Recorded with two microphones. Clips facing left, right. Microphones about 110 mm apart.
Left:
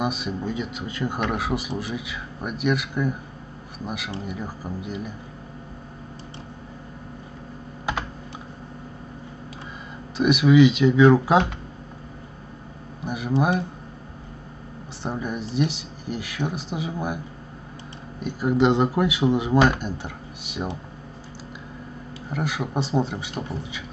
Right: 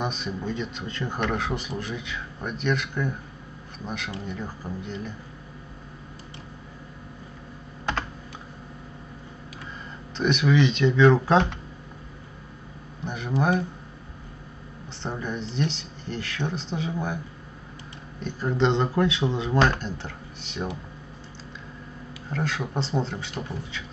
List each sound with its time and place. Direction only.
0.0 s speech: 5° left (ahead or behind)
7.9 s computer keyboard: 10° left (ahead or behind)
10.1 s speech: 10° left (ahead or behind)
13.0 s speech: 10° left (ahead or behind)
15.0 s speech: 10° left (ahead or behind)
18.2 s speech: 10° left (ahead or behind)
22.3 s speech: 10° left (ahead or behind)